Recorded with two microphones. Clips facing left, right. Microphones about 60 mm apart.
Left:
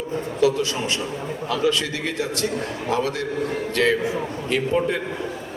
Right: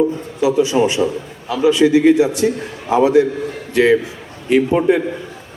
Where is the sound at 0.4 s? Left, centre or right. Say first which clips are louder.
Right 7 dB; centre.